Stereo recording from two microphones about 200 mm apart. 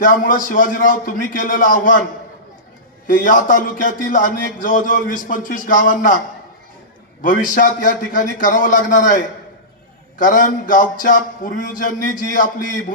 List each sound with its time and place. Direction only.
0.0 s a man's voice: 40° left (ahead or behind)
3.1 s a man's voice: 40° left (ahead or behind)
7.2 s a man's voice: 40° left (ahead or behind)